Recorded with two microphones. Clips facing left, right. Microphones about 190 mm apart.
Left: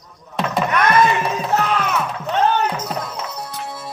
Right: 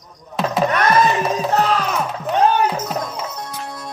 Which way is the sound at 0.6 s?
35° right (ahead or behind).